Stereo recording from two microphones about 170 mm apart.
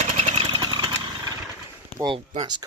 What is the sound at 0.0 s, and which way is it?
Vehicle, 35° right (ahead or behind).